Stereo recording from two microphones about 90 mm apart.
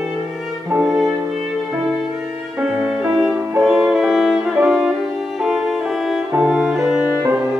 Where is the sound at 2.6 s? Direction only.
10° right (ahead or behind).